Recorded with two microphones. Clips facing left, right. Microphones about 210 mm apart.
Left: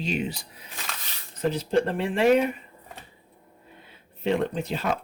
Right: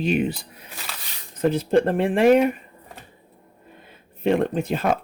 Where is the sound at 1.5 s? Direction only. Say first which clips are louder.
Right 5 dB; 50° right (ahead or behind).